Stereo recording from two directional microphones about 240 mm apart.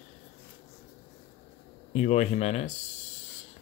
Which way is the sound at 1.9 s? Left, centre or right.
Left.